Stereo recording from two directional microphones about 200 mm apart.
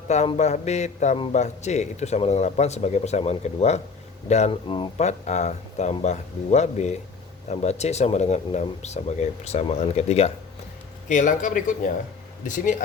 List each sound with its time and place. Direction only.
0.1 s a man's voice: 35° left (ahead or behind)